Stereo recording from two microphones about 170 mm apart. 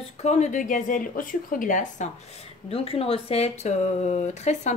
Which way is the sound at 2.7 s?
35° left (ahead or behind).